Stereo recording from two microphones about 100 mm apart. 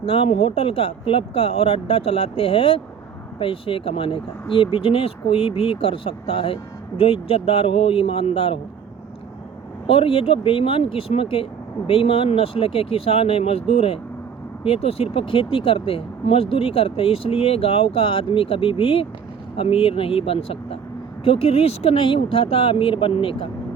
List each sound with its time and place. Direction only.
0.0 s speech: 70° left (ahead or behind)
9.8 s speech: 70° left (ahead or behind)